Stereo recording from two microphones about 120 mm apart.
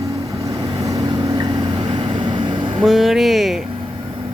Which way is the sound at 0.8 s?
35° right (ahead or behind).